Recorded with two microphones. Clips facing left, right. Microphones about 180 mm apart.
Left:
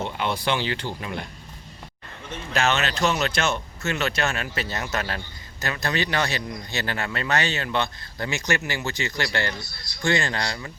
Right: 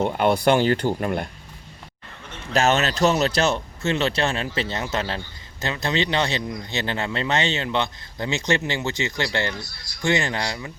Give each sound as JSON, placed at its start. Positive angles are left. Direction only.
{"t": 0.0, "sound": "speech", "side_deg": -50}
{"t": 2.5, "sound": "speech", "side_deg": -40}